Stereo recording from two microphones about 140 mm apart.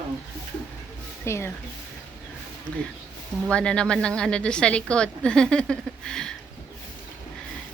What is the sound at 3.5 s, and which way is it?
A woman's voice, 5° left (ahead or behind).